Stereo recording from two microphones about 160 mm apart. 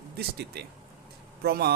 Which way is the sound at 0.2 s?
90° right.